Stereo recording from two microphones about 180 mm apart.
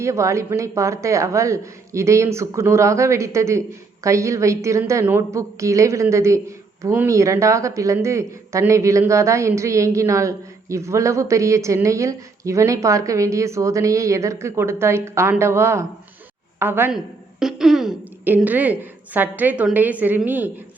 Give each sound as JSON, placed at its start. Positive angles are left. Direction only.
{"t": 0.0, "sound": "speech", "side_deg": -15}